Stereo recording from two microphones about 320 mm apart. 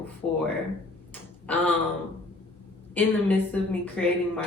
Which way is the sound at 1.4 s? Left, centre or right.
Centre.